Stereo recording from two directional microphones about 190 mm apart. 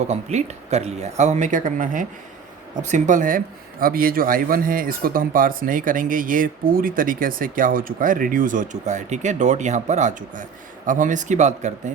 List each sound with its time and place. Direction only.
0.1 s speech: 35° right (ahead or behind)